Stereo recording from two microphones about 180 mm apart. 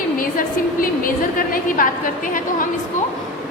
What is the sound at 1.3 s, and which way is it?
Speech, 50° left (ahead or behind).